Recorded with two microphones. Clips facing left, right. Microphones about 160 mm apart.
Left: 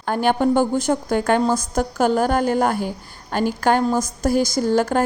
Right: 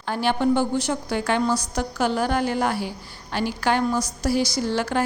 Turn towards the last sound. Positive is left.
turn(degrees=45)  # may be behind; listen again after turning